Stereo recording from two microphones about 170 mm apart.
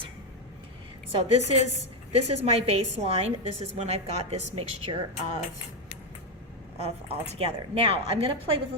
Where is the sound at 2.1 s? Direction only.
35° right (ahead or behind).